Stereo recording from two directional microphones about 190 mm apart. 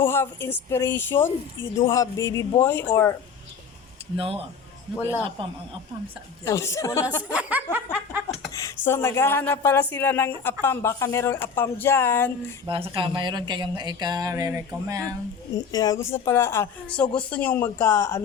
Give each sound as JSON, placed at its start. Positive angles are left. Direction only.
{"t": 0.0, "sound": "speech", "side_deg": 10}
{"t": 4.2, "sound": "speech", "side_deg": -30}
{"t": 6.4, "sound": "speech", "side_deg": 15}
{"t": 7.3, "sound": "snicker", "side_deg": -10}
{"t": 8.5, "sound": "speech", "side_deg": 15}
{"t": 12.6, "sound": "speech", "side_deg": -30}
{"t": 15.5, "sound": "speech", "side_deg": 20}